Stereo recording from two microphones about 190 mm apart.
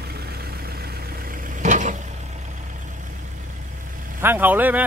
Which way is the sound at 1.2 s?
40° right (ahead or behind).